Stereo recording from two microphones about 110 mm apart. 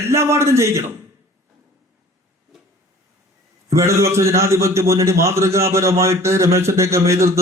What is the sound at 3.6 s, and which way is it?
A man's voice, 25° right (ahead or behind).